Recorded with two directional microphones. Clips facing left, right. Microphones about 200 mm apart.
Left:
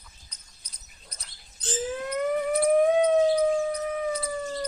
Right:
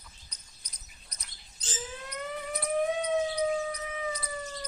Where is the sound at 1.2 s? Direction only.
55° left (ahead or behind).